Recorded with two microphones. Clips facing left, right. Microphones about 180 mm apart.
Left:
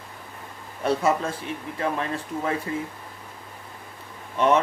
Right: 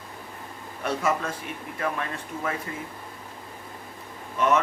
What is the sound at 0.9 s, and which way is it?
Speech, 30° left (ahead or behind).